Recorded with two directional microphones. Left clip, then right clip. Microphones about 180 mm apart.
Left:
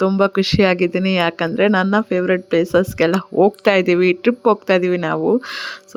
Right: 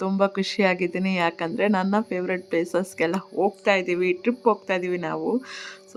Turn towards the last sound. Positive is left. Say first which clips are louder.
# left 9 dB
turn(degrees=25)  # may be behind; listen again after turning